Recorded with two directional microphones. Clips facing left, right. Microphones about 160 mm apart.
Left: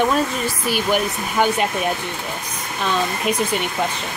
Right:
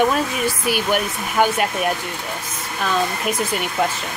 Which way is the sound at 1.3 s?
5° right (ahead or behind).